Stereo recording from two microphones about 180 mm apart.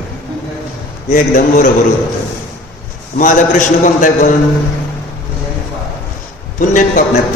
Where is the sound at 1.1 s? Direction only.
50° left (ahead or behind).